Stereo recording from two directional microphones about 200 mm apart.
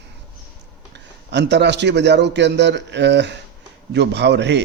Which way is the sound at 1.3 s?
60° right (ahead or behind).